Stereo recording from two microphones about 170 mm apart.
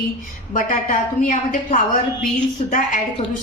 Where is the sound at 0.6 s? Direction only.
50° left (ahead or behind).